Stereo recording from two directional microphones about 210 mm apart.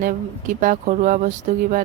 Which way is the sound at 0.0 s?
40° right (ahead or behind).